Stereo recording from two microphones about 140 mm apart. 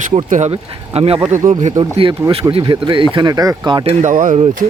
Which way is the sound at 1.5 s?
60° right (ahead or behind).